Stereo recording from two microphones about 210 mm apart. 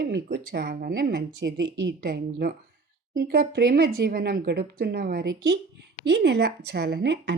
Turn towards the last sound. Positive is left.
turn(degrees=-55)  # may be behind; listen again after turning